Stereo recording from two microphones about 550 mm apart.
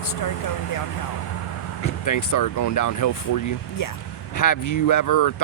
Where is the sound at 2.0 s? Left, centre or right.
Left.